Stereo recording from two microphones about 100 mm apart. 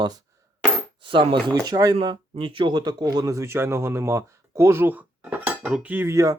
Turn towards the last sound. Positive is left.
turn(degrees=-30)  # may be behind; listen again after turning